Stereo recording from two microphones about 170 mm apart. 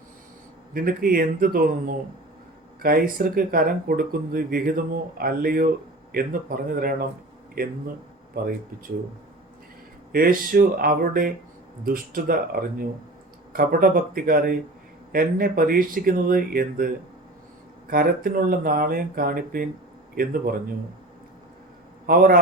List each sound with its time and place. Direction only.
0.7 s speech: 60° right (ahead or behind)
10.1 s speech: 60° right (ahead or behind)
17.9 s speech: 55° right (ahead or behind)
22.0 s a man's voice: 60° right (ahead or behind)